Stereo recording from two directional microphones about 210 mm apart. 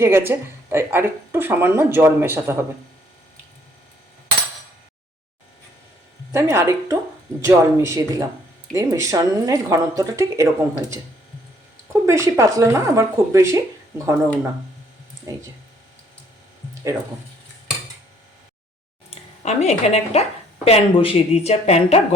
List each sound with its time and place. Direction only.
0.0 s speech: 10° right (ahead or behind)
6.3 s speech: 15° right (ahead or behind)
12.0 s speech: 15° right (ahead or behind)
19.4 s speech: 30° left (ahead or behind)